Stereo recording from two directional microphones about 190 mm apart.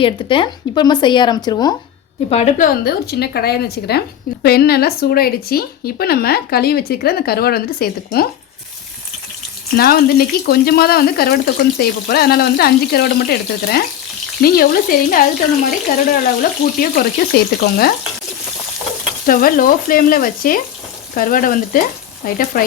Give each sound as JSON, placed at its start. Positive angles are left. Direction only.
{"t": 0.0, "sound": "speech", "side_deg": 25}
{"t": 2.3, "sound": "a woman's voice", "side_deg": 35}
{"t": 2.8, "sound": "speech", "side_deg": 55}
{"t": 9.7, "sound": "speech", "side_deg": 55}
{"t": 19.2, "sound": "speech", "side_deg": 50}